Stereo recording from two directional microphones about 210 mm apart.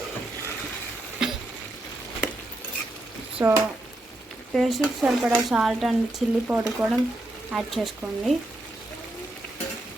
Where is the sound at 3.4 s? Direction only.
15° right (ahead or behind).